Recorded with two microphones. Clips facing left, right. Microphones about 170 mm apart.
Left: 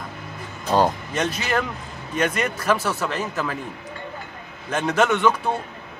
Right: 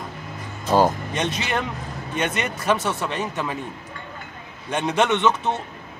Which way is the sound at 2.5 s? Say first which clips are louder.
Even; 25° right (ahead or behind).